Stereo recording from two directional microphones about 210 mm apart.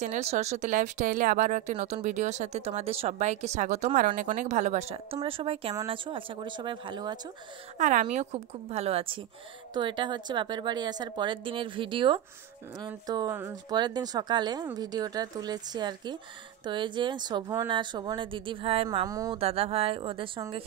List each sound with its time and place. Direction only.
0.0 s speech: 35° right (ahead or behind)
7.8 s speech: 35° right (ahead or behind)
18.9 s speech: 15° right (ahead or behind)
19.3 s speech: 30° right (ahead or behind)